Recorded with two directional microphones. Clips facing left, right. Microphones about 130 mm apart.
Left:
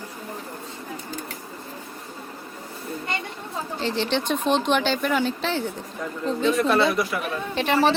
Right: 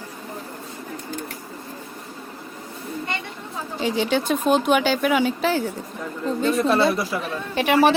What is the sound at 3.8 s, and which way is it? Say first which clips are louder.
Speech: right 3 dB; 10° right (ahead or behind).